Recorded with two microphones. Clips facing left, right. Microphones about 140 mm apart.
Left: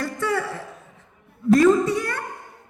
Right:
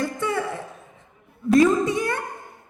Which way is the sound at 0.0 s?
20° right (ahead or behind).